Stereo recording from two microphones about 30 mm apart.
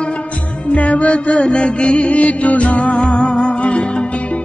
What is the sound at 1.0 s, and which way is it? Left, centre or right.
Music, left.